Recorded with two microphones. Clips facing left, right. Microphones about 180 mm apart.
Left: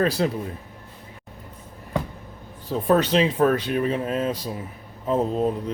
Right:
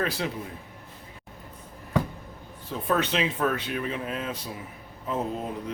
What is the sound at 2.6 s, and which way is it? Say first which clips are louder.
Speech: left 7 dB; 35° left (ahead or behind).